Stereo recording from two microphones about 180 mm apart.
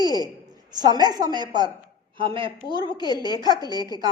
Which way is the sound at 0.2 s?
20° right (ahead or behind).